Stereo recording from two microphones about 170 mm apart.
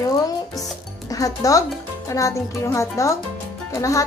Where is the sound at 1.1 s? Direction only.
20° left (ahead or behind).